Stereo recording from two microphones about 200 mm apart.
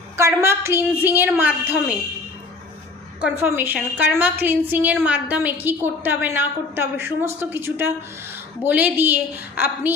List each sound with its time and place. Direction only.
0.2 s a woman's voice: 15° right (ahead or behind)
3.2 s a woman's voice: 10° right (ahead or behind)